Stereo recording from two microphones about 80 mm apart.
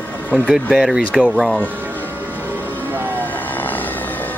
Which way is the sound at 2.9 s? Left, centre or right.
Right.